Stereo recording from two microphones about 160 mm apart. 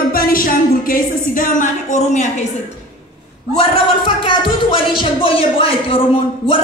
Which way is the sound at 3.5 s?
35° left (ahead or behind).